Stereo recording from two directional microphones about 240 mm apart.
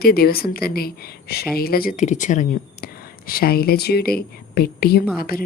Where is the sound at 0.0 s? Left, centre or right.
Left.